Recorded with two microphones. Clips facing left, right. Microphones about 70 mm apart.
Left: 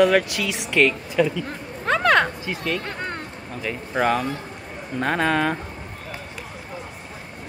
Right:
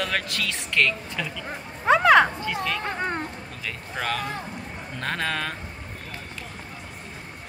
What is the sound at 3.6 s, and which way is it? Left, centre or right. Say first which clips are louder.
Speech: left 8 dB; centre.